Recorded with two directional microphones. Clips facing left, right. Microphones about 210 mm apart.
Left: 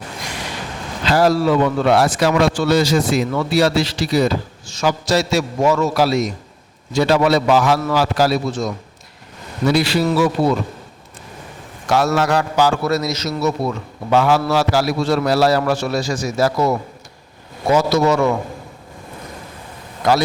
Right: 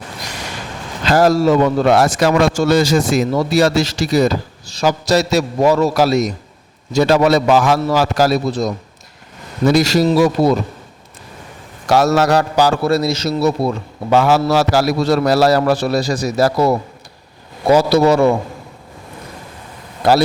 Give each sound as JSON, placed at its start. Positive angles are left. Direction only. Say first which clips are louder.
{"t": 1.0, "sound": "a man's voice", "louder": "right 3 dB", "side_deg": -45}
{"t": 11.9, "sound": "a man's voice", "louder": "right 4 dB", "side_deg": -40}
{"t": 20.0, "sound": "a man's voice", "louder": "right 3 dB", "side_deg": -35}